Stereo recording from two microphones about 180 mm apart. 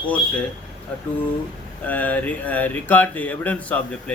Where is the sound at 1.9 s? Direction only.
10° left (ahead or behind).